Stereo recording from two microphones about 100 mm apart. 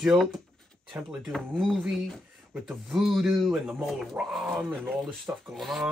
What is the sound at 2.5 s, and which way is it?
Speech, 5° right (ahead or behind).